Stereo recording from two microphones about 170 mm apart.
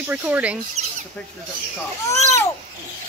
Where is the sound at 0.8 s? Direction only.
40° right (ahead or behind).